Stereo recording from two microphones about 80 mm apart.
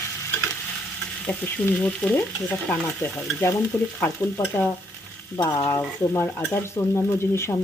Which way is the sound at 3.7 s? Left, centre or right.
Left.